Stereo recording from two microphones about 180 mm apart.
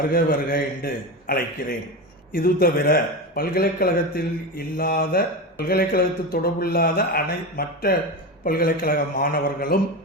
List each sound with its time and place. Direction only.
0.1 s a man's voice: 55° left (ahead or behind)